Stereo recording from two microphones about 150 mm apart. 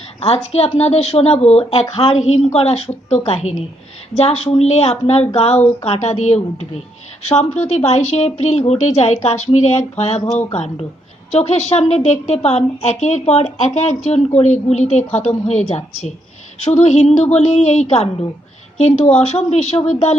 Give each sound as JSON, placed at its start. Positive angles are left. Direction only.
{"t": 0.2, "sound": "a woman's voice", "side_deg": 45}